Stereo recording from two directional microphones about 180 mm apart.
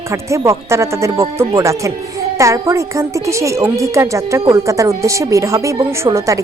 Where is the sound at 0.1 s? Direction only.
15° right (ahead or behind).